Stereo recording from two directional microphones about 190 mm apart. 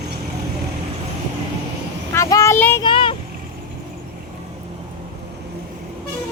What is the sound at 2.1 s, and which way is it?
Speech, 15° left (ahead or behind).